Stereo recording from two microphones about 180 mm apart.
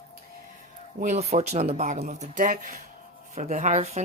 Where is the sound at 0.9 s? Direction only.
40° right (ahead or behind).